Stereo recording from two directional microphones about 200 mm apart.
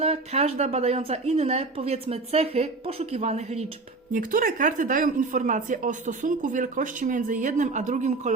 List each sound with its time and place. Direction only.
0.0 s speech: 30° right (ahead or behind)